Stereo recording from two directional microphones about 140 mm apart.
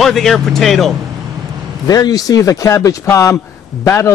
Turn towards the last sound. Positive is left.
turn(degrees=20)  # may be behind; listen again after turning